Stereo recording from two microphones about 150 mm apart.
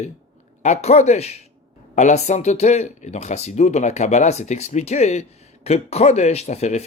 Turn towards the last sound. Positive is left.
turn(degrees=45)  # may be behind; listen again after turning